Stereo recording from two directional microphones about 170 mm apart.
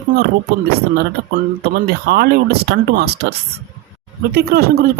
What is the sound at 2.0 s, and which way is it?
Speech, 75° right (ahead or behind).